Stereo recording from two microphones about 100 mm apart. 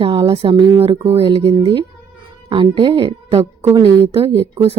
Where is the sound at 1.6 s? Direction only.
65° right (ahead or behind).